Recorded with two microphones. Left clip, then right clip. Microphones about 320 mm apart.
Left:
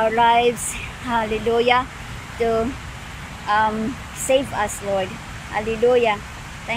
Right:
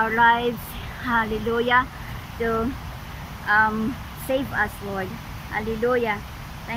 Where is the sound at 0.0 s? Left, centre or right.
Centre.